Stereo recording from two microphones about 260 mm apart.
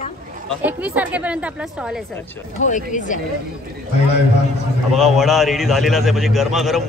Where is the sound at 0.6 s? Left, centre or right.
Centre.